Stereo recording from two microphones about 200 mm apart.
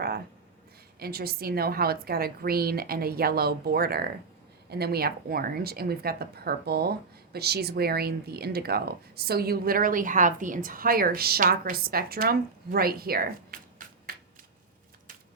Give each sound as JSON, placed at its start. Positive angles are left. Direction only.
{"t": 0.9, "sound": "speech", "side_deg": -50}